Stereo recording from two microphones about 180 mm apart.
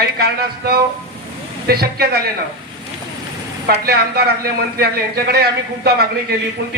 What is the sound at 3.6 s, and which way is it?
A man's voice, 60° right (ahead or behind).